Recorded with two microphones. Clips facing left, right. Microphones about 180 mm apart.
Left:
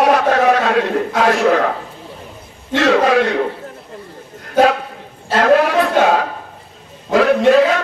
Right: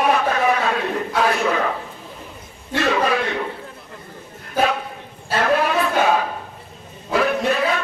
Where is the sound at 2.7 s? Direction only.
85° left.